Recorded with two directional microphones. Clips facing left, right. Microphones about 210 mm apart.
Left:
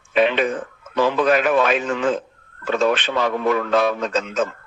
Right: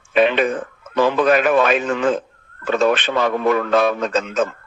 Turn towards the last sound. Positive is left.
turn(degrees=-55)  # may be behind; listen again after turning